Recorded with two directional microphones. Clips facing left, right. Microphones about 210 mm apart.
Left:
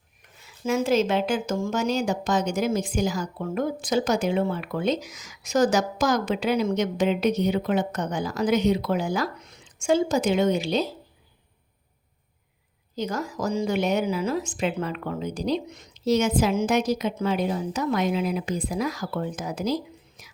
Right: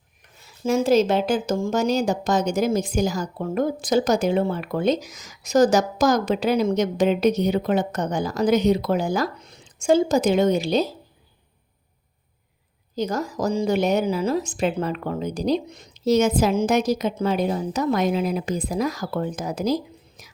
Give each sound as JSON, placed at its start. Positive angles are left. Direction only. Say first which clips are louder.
{"t": 0.6, "sound": "a woman's voice", "louder": "right 4 dB", "side_deg": -35}
{"t": 13.0, "sound": "a woman's voice", "louder": "right 4 dB", "side_deg": -40}